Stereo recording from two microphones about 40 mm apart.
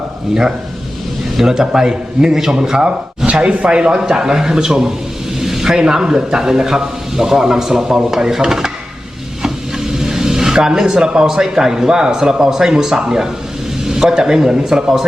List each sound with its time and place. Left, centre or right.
1.4 s speech: centre
3.5 s speech: right; by 8.7 s centre
9.4 s a sound: centre
11.0 s speech: centre